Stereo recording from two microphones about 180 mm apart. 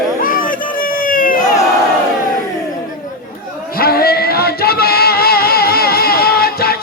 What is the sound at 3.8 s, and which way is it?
Music, 60° left (ahead or behind).